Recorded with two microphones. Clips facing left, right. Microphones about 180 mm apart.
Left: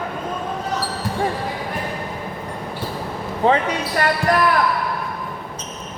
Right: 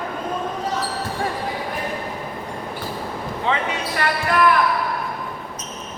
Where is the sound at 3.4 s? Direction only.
40° left (ahead or behind).